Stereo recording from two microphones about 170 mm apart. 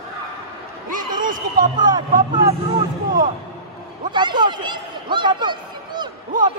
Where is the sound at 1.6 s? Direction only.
25° right (ahead or behind).